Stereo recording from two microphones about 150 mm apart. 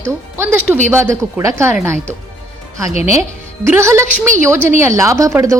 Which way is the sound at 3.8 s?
20° right (ahead or behind).